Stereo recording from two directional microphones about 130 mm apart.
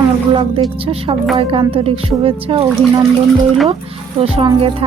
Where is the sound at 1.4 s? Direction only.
45° right (ahead or behind).